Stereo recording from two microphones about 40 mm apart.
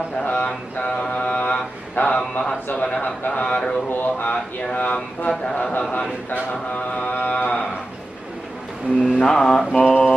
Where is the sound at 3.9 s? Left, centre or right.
Left.